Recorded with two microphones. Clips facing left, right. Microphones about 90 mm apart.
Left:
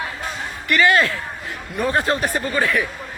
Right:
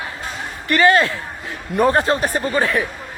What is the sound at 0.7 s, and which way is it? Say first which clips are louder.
Speech: right 2 dB; 35° right (ahead or behind).